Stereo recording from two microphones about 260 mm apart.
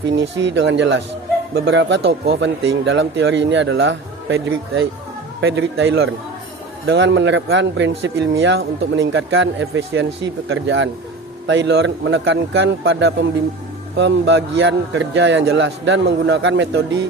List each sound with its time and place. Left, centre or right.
0.2 s speech: right